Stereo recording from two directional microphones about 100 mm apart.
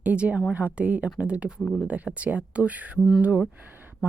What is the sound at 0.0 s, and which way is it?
Speech, 15° right (ahead or behind).